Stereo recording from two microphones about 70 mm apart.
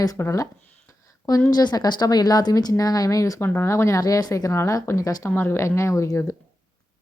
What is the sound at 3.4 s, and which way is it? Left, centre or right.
Speech, left.